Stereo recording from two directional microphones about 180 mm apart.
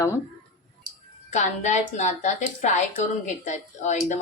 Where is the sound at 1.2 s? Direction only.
40° left (ahead or behind).